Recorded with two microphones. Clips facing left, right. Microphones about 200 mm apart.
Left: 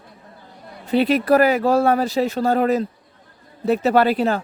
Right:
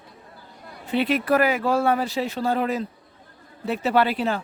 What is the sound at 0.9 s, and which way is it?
Speech, 40° left (ahead or behind).